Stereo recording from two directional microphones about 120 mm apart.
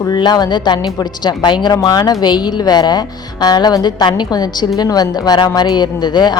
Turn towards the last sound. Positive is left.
turn(degrees=35)  # may be behind; listen again after turning